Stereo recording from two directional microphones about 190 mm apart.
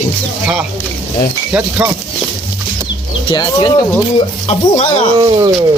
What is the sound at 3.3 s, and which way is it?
Speech, 20° left (ahead or behind).